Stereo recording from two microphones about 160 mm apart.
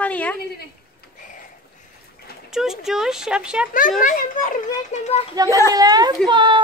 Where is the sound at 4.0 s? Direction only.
55° left (ahead or behind).